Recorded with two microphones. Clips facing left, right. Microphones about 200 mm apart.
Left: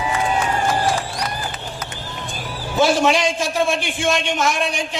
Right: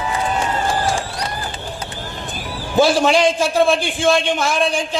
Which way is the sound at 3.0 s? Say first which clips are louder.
Right 3 dB; 30° right (ahead or behind).